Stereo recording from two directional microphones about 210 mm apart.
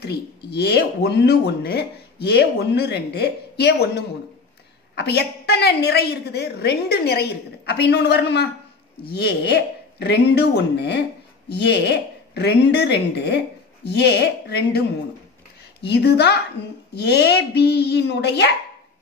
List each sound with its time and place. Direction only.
0.5 s speech: 50° left (ahead or behind)